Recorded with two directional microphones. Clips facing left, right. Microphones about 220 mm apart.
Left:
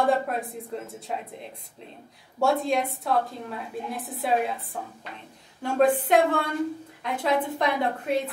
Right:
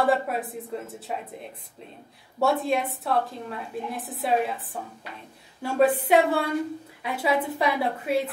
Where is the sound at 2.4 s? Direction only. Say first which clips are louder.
Even; 5° right (ahead or behind).